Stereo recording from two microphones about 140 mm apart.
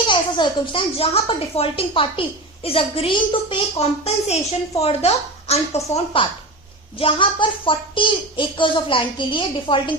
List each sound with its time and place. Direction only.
0.1 s a woman's voice: 35° left (ahead or behind)
7.0 s speech: 35° left (ahead or behind)